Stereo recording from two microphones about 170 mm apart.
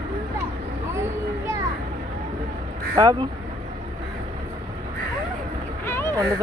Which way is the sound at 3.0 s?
25° right (ahead or behind).